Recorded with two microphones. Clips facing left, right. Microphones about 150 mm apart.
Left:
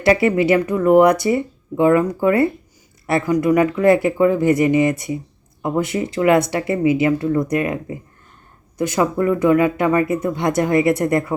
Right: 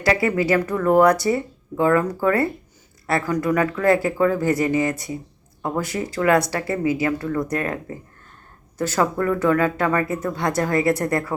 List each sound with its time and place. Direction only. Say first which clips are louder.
0.0 s speech: left 5 dB; 25° left (ahead or behind)